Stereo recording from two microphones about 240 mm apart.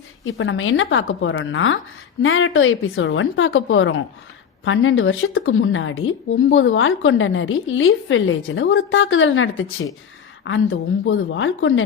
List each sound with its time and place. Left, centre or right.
0.3 s a woman's voice: left